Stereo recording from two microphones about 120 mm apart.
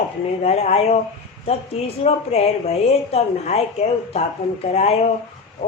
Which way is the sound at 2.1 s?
65° left (ahead or behind).